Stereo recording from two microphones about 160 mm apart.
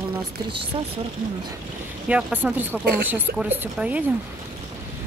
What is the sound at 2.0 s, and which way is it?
Speech, 10° right (ahead or behind).